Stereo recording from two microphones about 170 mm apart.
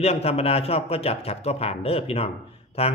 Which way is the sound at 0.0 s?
35° left (ahead or behind).